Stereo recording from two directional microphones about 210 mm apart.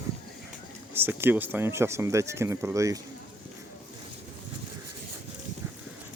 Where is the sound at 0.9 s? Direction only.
10° right (ahead or behind).